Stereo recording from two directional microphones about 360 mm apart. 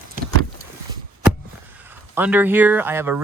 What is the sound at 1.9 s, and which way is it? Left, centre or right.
Speech, centre.